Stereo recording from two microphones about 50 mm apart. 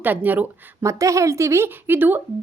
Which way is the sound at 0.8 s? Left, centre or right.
Right.